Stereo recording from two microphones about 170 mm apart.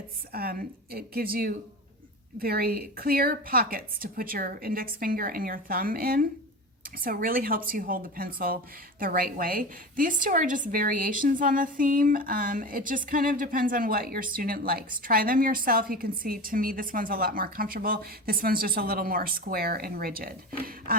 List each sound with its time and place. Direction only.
0.3 s a woman's voice: 65° right (ahead or behind)